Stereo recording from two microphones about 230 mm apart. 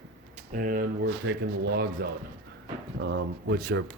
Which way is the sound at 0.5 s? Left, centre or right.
Right.